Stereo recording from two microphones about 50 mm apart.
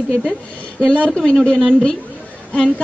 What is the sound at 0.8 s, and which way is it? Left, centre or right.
Speech, centre.